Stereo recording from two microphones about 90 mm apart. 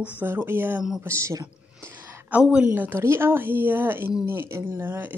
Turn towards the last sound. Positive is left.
turn(degrees=-20)  # may be behind; listen again after turning